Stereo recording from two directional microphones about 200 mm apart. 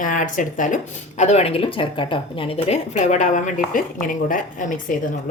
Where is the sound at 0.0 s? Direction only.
40° left (ahead or behind).